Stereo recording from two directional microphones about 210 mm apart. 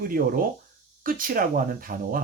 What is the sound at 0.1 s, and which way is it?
Speech, 40° right (ahead or behind).